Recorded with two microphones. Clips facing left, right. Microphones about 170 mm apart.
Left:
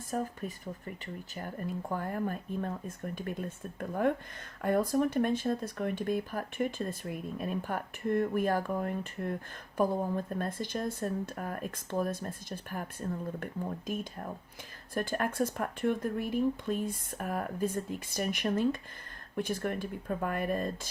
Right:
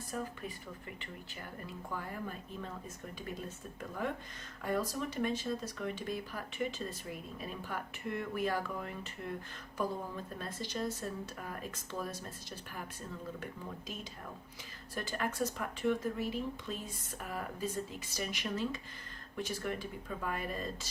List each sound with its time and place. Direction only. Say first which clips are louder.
0.1 s speech: left 6 dB; 45° left (ahead or behind)
3.8 s speech: left 9 dB; 55° left (ahead or behind)